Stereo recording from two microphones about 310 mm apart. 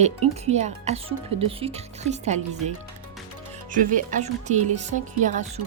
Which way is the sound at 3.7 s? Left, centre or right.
Right.